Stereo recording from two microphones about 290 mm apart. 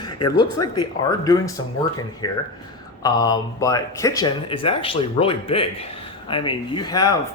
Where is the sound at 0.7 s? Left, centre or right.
Centre.